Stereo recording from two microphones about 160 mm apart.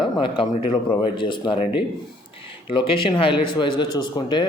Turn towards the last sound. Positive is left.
turn(degrees=30)  # may be behind; listen again after turning